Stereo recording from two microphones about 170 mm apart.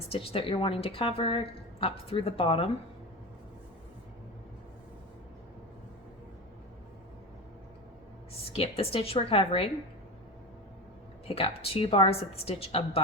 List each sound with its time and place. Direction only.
0.1 s a woman's voice: 35° left (ahead or behind)
8.5 s a woman's voice: 35° left (ahead or behind)
11.3 s a woman's voice: 35° left (ahead or behind)